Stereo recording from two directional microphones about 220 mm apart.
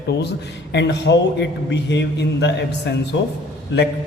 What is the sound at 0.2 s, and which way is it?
A man's voice, 50° left (ahead or behind).